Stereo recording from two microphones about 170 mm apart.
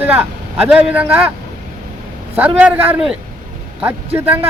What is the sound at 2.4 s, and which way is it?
Speech, 10° right (ahead or behind).